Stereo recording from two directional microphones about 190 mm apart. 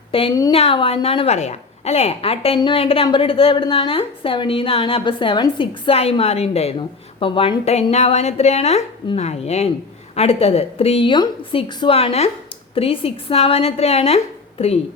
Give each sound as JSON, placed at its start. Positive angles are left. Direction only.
{"t": 0.1, "sound": "a woman's voice", "side_deg": 30}